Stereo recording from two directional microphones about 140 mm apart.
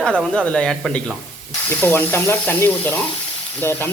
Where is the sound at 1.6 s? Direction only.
15° left (ahead or behind).